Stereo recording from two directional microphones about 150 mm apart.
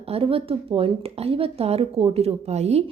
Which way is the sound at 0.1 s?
40° right (ahead or behind).